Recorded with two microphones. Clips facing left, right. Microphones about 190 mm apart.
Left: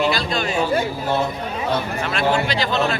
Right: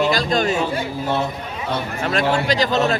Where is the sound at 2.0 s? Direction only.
40° right (ahead or behind).